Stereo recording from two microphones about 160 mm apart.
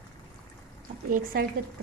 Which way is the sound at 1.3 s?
65° right (ahead or behind).